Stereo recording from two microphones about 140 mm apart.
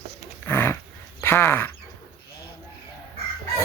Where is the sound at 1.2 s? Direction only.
15° left (ahead or behind).